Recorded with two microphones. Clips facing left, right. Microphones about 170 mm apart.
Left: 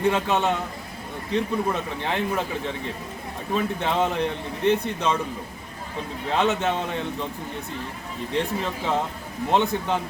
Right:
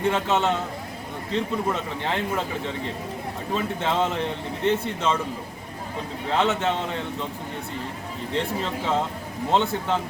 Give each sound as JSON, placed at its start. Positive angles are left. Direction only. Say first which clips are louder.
{"t": 0.1, "sound": "speech", "louder": "even", "side_deg": 15}
{"t": 6.3, "sound": "speech", "louder": "even", "side_deg": 15}
{"t": 8.3, "sound": "speech", "louder": "left 1 dB", "side_deg": 15}